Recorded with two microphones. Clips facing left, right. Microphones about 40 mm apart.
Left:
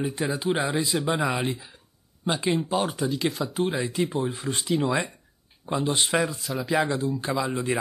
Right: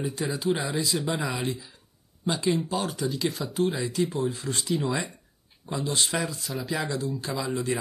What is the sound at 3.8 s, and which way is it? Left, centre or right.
Speech, left.